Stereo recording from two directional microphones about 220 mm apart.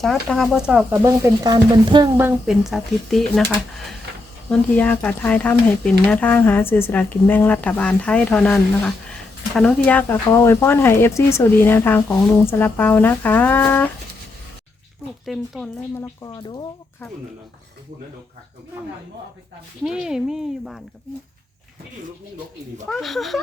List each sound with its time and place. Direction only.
0.0 s speech: centre (ahead or behind); by 2.0 s 20° right (ahead or behind)
2.1 s speech: 5° right (ahead or behind)
4.4 s speech: 5° left (ahead or behind)
15.3 s speech: 5° left (ahead or behind)
16.2 s speech: 20° left (ahead or behind)
19.8 s speech: centre (ahead or behind)
22.9 s speech: centre (ahead or behind)